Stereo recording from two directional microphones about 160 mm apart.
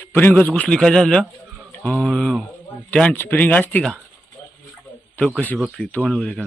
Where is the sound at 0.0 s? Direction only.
15° left (ahead or behind).